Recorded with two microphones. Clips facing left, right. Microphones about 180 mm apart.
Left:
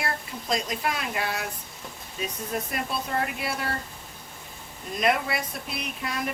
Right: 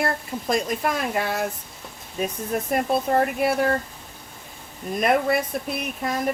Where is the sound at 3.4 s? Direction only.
50° right (ahead or behind).